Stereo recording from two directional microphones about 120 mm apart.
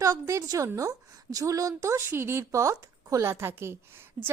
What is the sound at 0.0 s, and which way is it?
A woman's voice, 25° right (ahead or behind).